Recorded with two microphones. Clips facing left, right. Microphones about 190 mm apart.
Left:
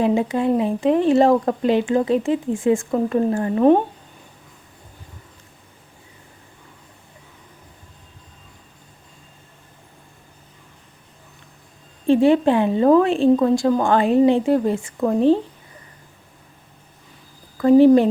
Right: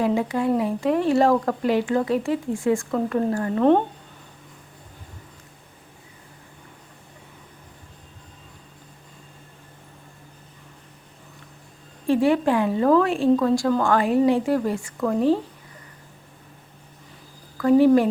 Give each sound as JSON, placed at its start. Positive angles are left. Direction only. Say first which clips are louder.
{"t": 0.0, "sound": "a woman's voice", "louder": "left 3 dB", "side_deg": 20}
{"t": 12.0, "sound": "a woman's voice", "louder": "left 4 dB", "side_deg": 25}
{"t": 17.6, "sound": "a woman's voice", "louder": "left 4 dB", "side_deg": 25}